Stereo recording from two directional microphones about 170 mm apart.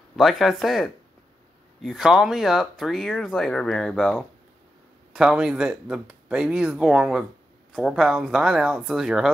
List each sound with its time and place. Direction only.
0.1 s speech: centre (ahead or behind)